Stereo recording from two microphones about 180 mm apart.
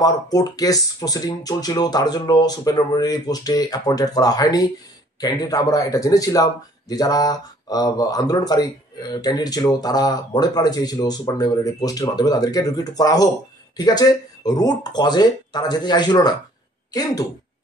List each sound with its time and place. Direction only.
0.0 s speech: 20° left (ahead or behind)